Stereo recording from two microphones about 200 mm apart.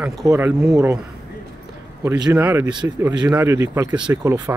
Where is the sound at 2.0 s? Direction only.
15° right (ahead or behind).